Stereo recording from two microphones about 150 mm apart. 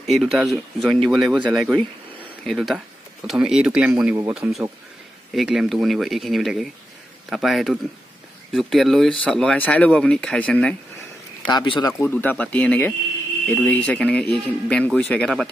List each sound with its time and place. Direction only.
0.0 s speech: centre (ahead or behind)
11.4 s speech: 30° left (ahead or behind)
12.0 s speech: 10° left (ahead or behind)